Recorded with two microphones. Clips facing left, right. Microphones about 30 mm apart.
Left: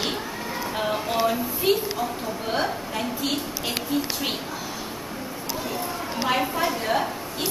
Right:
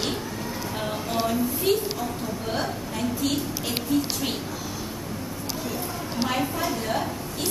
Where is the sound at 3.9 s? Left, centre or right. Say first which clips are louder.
Right 3 dB; centre.